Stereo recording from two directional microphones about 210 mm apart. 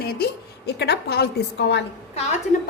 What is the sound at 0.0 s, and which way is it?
A woman's voice, 45° left (ahead or behind).